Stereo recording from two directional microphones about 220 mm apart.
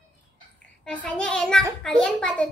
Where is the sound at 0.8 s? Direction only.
5° left (ahead or behind).